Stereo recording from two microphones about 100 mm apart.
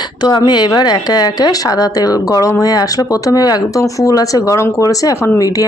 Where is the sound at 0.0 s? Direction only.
45° left (ahead or behind).